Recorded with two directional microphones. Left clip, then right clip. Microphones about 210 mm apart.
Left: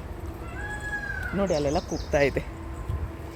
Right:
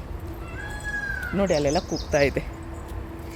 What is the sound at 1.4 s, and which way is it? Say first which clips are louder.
Speech: right 3 dB; 15° right (ahead or behind).